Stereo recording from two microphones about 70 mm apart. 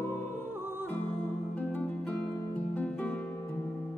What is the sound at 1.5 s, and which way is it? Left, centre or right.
Music, left.